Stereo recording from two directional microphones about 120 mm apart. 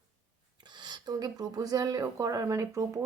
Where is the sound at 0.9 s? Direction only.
35° right (ahead or behind).